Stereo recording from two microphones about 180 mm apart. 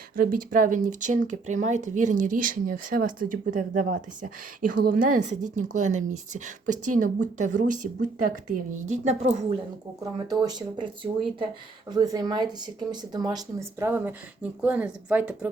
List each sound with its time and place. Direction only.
0.2 s speech: 50° right (ahead or behind)
10.0 s speech: 20° right (ahead or behind)